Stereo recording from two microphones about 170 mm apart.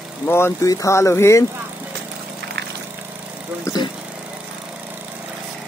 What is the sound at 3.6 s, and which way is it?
Vehicle, 20° left (ahead or behind).